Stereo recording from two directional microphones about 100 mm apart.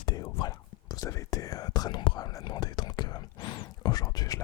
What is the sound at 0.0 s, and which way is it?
Whispering, 45° left (ahead or behind).